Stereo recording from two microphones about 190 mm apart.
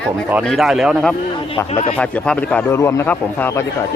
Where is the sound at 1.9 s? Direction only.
5° left (ahead or behind).